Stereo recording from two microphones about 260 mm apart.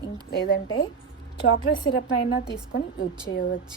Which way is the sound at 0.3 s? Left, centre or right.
Left.